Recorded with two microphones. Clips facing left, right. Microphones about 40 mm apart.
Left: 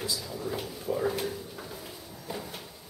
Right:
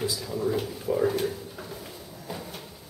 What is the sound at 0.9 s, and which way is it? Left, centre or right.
Speech, centre.